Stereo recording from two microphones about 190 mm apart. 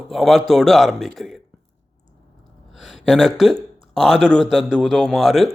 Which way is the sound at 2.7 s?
Centre (ahead or behind).